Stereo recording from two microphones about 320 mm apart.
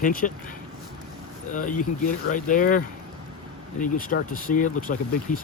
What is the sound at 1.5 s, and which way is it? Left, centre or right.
Speech, left.